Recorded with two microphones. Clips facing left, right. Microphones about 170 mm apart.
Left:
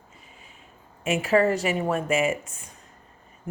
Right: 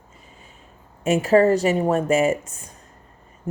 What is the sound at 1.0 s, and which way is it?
Speech, 40° right (ahead or behind).